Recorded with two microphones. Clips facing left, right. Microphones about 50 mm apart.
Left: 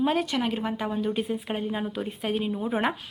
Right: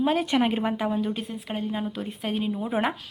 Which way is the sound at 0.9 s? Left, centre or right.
Centre.